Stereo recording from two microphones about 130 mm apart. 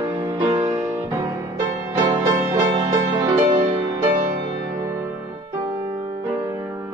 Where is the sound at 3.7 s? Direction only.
35° right (ahead or behind).